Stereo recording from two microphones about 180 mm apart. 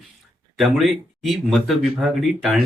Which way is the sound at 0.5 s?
Centre (ahead or behind).